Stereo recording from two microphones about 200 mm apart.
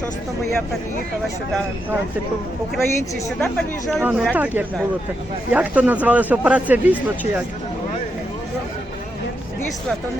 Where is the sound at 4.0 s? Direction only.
10° right (ahead or behind).